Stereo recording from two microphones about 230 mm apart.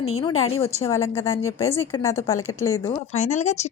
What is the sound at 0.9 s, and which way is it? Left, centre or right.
A woman's voice, centre.